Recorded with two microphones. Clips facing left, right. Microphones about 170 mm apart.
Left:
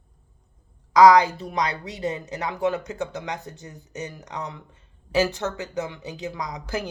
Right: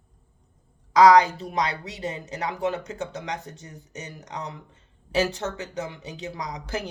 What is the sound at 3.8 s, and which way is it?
Speech, 35° left (ahead or behind).